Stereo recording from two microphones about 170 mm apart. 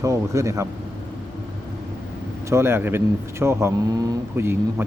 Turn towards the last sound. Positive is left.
turn(degrees=-15)  # may be behind; listen again after turning